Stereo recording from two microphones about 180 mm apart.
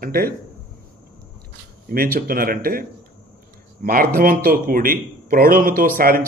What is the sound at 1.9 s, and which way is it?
Speech, 55° right (ahead or behind).